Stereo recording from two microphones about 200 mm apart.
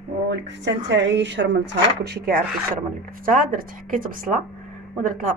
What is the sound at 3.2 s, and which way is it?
A woman's voice, 45° right (ahead or behind).